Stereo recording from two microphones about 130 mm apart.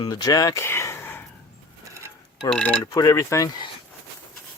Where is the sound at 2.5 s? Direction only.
10° left (ahead or behind).